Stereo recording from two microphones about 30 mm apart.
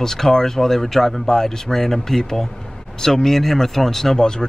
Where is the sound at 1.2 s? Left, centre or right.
Centre.